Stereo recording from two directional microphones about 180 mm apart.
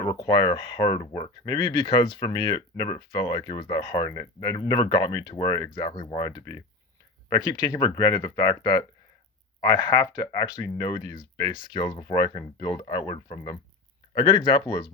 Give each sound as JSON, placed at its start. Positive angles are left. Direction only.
{"t": 0.0, "sound": "speech", "side_deg": 25}